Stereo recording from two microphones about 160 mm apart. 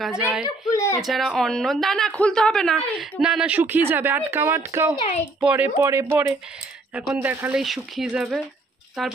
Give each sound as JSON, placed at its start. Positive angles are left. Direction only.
{"t": 0.0, "sound": "speech", "side_deg": -5}
{"t": 0.7, "sound": "speech", "side_deg": 20}
{"t": 1.0, "sound": "speech", "side_deg": 0}
{"t": 4.9, "sound": "speech", "side_deg": 40}
{"t": 5.4, "sound": "speech", "side_deg": -10}